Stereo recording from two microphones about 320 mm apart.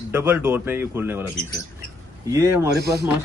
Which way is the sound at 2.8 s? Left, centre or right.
Right.